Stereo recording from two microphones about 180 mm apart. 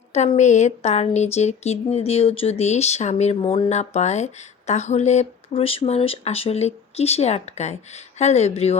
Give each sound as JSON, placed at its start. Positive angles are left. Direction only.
{"t": 0.1, "sound": "speech", "side_deg": 40}